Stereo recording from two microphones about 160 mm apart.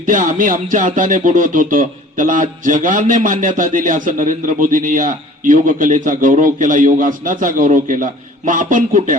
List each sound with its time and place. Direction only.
0.0 s music: 55° right (ahead or behind)